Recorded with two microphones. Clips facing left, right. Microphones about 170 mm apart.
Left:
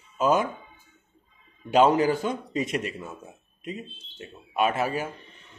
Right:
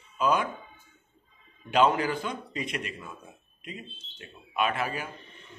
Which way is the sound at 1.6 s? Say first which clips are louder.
Left 4 dB; 40° left (ahead or behind).